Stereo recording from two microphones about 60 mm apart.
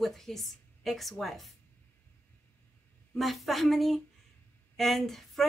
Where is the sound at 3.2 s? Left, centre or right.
Centre.